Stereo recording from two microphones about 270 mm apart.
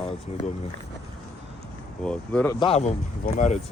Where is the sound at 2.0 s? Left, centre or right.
Centre.